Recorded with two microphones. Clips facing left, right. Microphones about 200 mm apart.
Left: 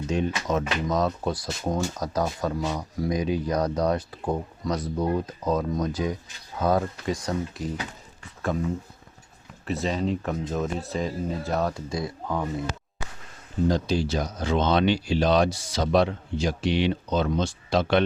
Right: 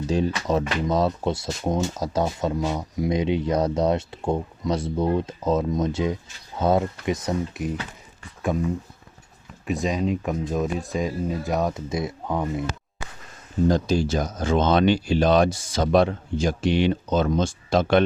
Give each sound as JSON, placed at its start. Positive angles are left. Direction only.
{"t": 0.1, "sound": "speech", "side_deg": -35}
{"t": 9.6, "sound": "speech", "side_deg": -15}
{"t": 13.7, "sound": "speech", "side_deg": -45}